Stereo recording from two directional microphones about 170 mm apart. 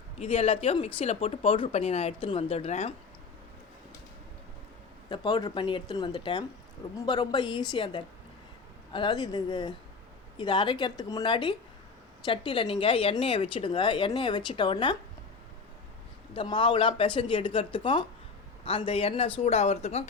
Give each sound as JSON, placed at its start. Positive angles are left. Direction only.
{"t": 0.2, "sound": "speech", "side_deg": 35}
{"t": 5.0, "sound": "speech", "side_deg": 25}
{"t": 16.3, "sound": "speech", "side_deg": 30}